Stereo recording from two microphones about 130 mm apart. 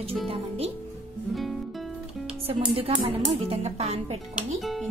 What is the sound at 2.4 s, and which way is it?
Speech, 50° right (ahead or behind).